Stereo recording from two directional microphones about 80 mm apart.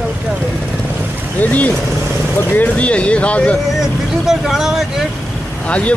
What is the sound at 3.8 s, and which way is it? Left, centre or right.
Speech, centre.